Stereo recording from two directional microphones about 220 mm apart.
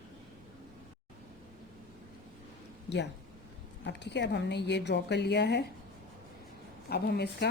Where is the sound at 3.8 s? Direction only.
50° left (ahead or behind).